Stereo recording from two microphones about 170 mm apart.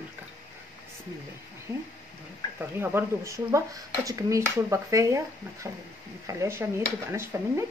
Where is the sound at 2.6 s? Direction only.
10° right (ahead or behind).